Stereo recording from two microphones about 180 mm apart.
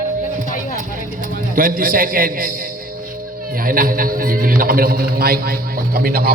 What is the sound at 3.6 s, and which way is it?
A man's voice, 50° right (ahead or behind).